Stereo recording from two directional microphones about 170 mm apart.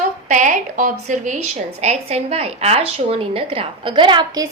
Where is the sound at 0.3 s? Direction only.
50° right (ahead or behind).